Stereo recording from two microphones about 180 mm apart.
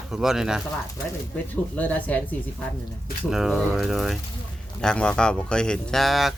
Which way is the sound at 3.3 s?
Centre (ahead or behind).